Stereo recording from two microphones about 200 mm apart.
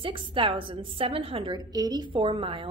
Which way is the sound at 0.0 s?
25° right (ahead or behind).